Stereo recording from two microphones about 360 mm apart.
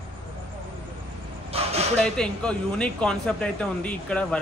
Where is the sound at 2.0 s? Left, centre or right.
Centre.